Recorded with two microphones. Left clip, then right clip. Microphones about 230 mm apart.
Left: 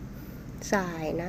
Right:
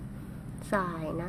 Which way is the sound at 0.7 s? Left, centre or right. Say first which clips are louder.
Left 2 dB; centre.